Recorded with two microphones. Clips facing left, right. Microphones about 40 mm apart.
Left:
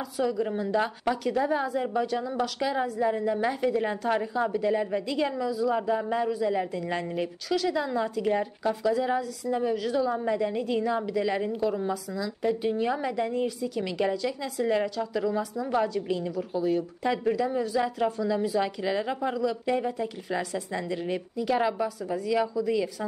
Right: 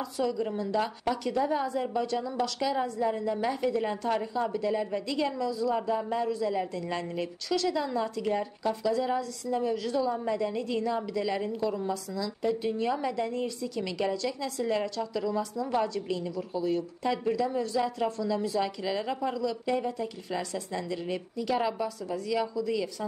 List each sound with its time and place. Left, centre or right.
0.0 s a woman's voice: left
21.8 s a woman's voice: centre